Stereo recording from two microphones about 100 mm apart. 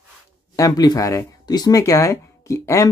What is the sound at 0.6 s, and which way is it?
Speech, 40° left (ahead or behind).